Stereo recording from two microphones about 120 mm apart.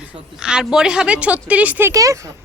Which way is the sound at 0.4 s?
5° right (ahead or behind).